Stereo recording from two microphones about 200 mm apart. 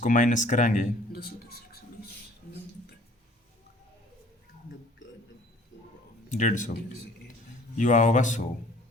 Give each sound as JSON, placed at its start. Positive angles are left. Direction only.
{"t": 0.0, "sound": "speech", "side_deg": 40}
{"t": 6.2, "sound": "speech", "side_deg": 40}
{"t": 7.8, "sound": "speech", "side_deg": 40}